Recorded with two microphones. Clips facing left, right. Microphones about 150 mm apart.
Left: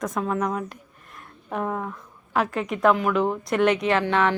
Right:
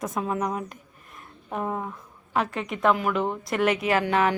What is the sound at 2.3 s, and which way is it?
Speech, centre (ahead or behind).